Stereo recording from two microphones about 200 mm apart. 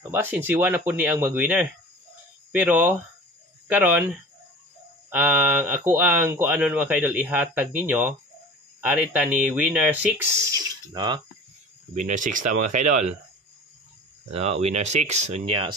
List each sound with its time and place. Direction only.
0.0 s speech: 10° right (ahead or behind)
11.9 s speech: 40° right (ahead or behind)
14.3 s speech: 30° right (ahead or behind)